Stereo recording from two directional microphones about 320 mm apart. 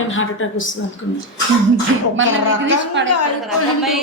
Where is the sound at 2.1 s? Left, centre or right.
Right.